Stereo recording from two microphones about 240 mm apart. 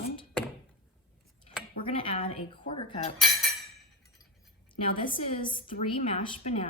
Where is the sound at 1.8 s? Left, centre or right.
Left.